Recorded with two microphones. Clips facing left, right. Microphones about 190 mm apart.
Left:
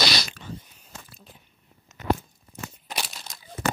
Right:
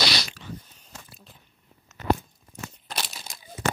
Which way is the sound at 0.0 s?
45° left (ahead or behind).